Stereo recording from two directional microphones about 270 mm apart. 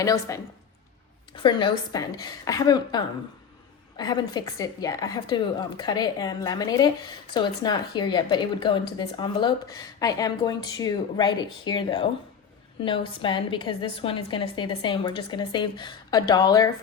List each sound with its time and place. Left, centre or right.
0.0 s a woman's voice: centre